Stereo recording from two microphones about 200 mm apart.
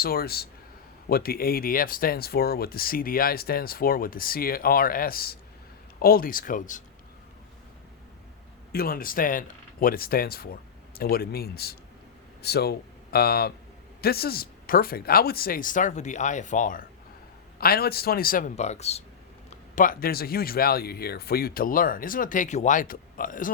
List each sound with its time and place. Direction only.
0.0 s speech: 50° left (ahead or behind)
8.7 s speech: 45° left (ahead or behind)
19.7 s speech: 45° left (ahead or behind)